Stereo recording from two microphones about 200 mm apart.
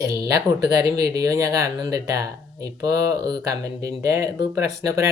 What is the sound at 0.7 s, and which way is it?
Speech, 15° right (ahead or behind).